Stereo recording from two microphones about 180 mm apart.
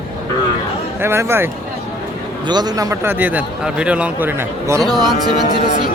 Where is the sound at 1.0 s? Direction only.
15° right (ahead or behind).